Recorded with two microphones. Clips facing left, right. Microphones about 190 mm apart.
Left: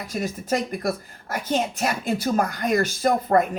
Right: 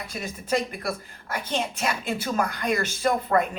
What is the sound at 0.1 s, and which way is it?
A woman's voice, 45° left (ahead or behind).